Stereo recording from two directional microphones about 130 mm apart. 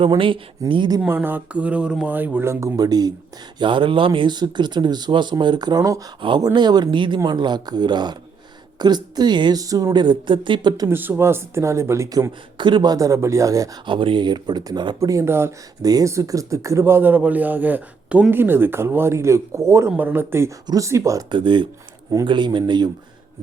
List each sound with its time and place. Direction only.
0.2 s speech: 40° right (ahead or behind)
1.0 s speech: 15° right (ahead or behind); by 10.8 s 35° right (ahead or behind)
10.8 s speech: 15° right (ahead or behind)
13.8 s speech: 40° right (ahead or behind)